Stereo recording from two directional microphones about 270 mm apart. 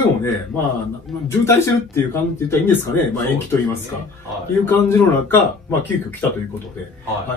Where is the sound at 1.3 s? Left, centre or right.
Centre.